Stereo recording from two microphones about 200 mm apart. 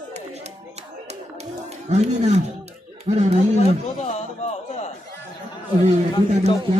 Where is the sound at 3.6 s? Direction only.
30° left (ahead or behind).